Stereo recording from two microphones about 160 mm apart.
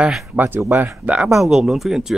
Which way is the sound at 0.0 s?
5° right (ahead or behind).